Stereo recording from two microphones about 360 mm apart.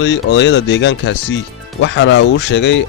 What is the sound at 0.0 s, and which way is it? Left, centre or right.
Speech, left.